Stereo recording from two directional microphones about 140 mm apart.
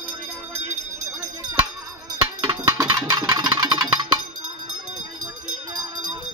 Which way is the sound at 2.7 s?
25° right (ahead or behind).